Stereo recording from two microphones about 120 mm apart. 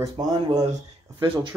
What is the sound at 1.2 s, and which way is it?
Speech, 45° right (ahead or behind).